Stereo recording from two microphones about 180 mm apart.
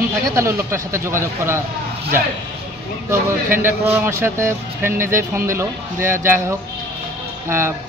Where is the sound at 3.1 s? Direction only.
10° right (ahead or behind).